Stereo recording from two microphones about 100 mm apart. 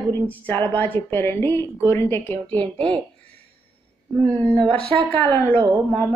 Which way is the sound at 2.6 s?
60° right (ahead or behind).